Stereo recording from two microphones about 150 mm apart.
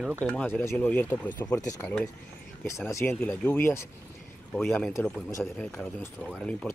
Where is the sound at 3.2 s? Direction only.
10° left (ahead or behind).